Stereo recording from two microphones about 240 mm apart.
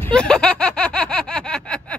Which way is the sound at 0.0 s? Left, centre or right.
Centre.